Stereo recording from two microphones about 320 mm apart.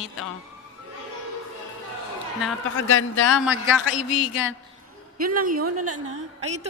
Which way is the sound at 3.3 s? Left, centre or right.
Centre.